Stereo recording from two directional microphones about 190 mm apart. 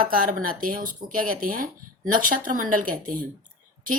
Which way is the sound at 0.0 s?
45° right (ahead or behind).